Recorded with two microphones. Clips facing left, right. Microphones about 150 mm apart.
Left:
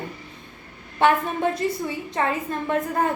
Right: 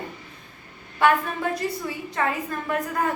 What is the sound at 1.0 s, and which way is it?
A woman's voice, 25° left (ahead or behind).